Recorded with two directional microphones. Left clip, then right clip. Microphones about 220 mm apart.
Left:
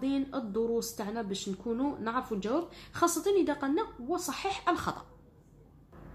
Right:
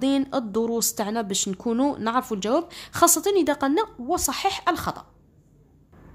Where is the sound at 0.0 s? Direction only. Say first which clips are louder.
Right 9 dB; 40° right (ahead or behind).